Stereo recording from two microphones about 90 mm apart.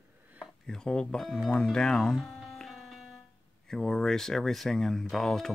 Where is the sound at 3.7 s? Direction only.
5° left (ahead or behind).